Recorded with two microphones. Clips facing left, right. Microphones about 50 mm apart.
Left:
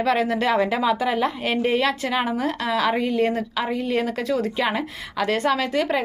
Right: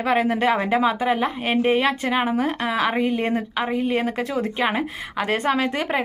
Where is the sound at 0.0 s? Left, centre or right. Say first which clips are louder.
Right 1 dB; right.